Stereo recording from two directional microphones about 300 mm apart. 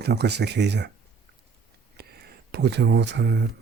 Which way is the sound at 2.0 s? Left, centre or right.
Right.